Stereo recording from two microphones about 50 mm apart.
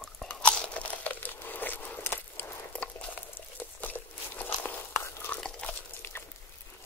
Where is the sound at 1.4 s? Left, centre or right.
Left.